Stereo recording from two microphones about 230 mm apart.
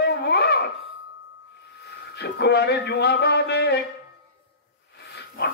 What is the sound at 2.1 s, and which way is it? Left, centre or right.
A man's voice, left.